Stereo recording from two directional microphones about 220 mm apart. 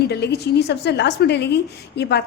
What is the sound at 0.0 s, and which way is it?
A woman's voice, 50° left (ahead or behind).